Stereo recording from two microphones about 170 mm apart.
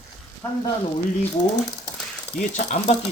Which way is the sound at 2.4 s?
45° left (ahead or behind).